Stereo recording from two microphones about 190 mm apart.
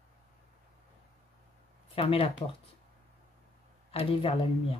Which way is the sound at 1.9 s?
30° left (ahead or behind).